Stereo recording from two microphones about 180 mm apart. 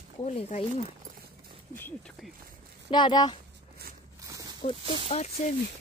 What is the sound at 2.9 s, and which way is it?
Speech, 25° left (ahead or behind).